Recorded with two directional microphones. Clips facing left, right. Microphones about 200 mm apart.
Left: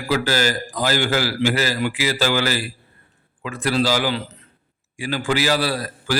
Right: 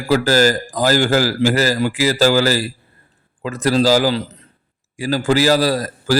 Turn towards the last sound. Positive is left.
turn(degrees=-40)  # may be behind; listen again after turning